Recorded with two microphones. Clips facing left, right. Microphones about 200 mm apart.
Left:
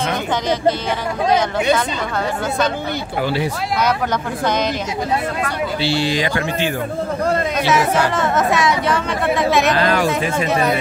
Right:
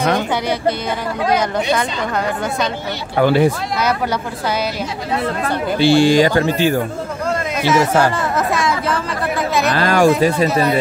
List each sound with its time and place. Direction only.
3.2 s speech: 55° right (ahead or behind)
5.8 s speech: 50° right (ahead or behind)
7.7 s speech: centre (ahead or behind)
9.8 s speech: 45° right (ahead or behind)